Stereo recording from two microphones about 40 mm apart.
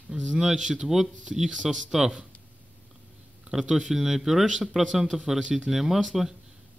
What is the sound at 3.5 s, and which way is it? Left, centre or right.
Speech, centre.